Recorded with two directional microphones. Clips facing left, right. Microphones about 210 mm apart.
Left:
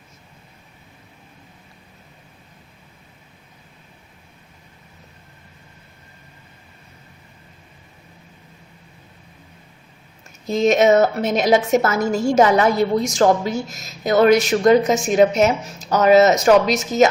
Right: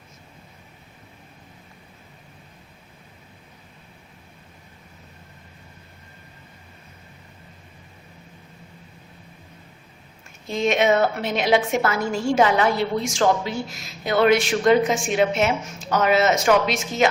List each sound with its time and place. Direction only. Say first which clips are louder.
10.4 s a woman's voice: left 5 dB; 40° left (ahead or behind)